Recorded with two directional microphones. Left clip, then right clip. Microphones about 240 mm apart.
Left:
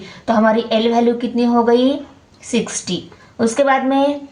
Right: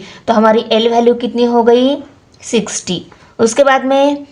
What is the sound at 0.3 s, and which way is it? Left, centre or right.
A woman's voice, right.